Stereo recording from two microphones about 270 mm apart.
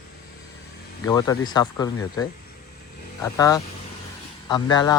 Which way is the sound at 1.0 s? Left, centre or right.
Centre.